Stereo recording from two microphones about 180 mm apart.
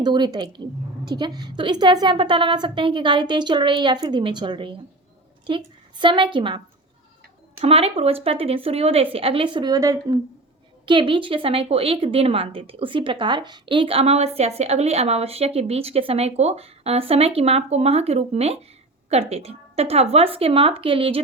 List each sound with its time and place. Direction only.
0.0 s a woman's voice: 25° right (ahead or behind)
7.6 s a woman's voice: 35° right (ahead or behind)